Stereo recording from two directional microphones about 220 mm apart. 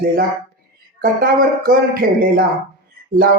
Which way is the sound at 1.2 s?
40° right (ahead or behind).